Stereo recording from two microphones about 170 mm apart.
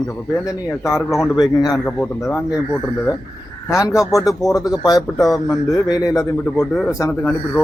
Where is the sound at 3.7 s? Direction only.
20° left (ahead or behind).